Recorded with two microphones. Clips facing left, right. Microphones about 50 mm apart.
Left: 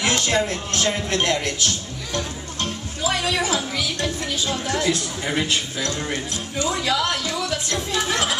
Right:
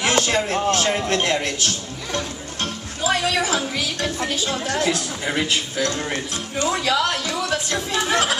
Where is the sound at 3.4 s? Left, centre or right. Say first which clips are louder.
Right 1 dB; right.